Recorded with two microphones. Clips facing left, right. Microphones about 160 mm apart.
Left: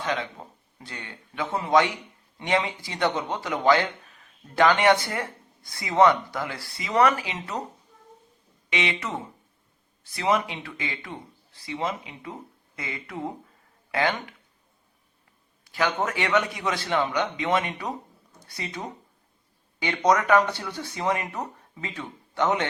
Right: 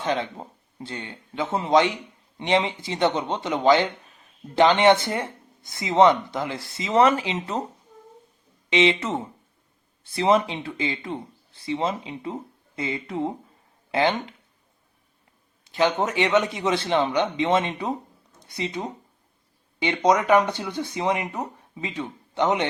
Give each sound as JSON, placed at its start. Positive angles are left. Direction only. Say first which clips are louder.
{"t": 0.0, "sound": "speech", "louder": "right 3 dB", "side_deg": -30}
{"t": 8.7, "sound": "speech", "louder": "right 8 dB", "side_deg": -25}
{"t": 15.6, "sound": "speech", "louder": "right 4 dB", "side_deg": -20}